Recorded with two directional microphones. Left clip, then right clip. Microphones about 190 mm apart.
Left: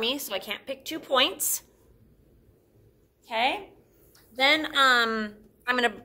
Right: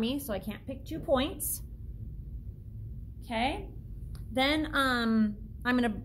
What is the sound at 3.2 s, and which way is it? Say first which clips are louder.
A woman's voice: left 6 dB; centre (ahead or behind).